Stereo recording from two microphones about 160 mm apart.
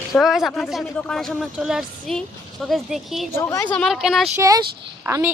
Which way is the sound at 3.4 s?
20° left (ahead or behind).